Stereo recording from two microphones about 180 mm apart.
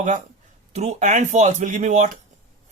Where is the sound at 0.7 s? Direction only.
40° right (ahead or behind).